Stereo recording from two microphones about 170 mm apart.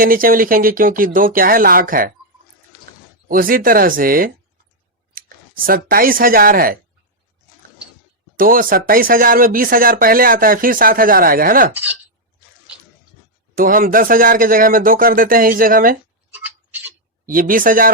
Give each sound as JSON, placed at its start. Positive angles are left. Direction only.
{"t": 0.0, "sound": "speech", "side_deg": -55}
{"t": 3.2, "sound": "speech", "side_deg": -55}
{"t": 8.4, "sound": "speech", "side_deg": -55}
{"t": 11.7, "sound": "speech", "side_deg": -10}
{"t": 13.6, "sound": "speech", "side_deg": -55}
{"t": 16.3, "sound": "tick-tock", "side_deg": -10}
{"t": 17.2, "sound": "speech", "side_deg": -55}